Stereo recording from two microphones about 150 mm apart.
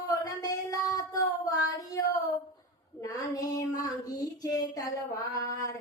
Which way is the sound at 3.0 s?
25° left (ahead or behind).